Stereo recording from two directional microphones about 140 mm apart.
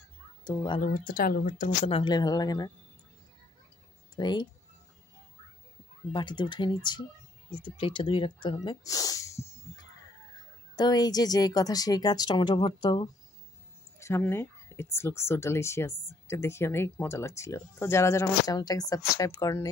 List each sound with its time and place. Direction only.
0.4 s speech: 30° left (ahead or behind)
0.7 s speech: 85° left
1.9 s speech: 35° left (ahead or behind)
4.1 s speech: 30° left (ahead or behind)
6.1 s speech: 35° left (ahead or behind)
13.9 s speech: 20° left (ahead or behind)